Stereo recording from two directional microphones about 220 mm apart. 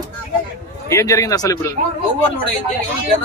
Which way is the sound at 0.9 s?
15° left (ahead or behind).